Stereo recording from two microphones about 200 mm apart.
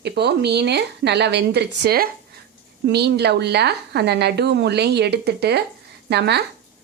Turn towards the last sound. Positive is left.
turn(degrees=-55)  # may be behind; listen again after turning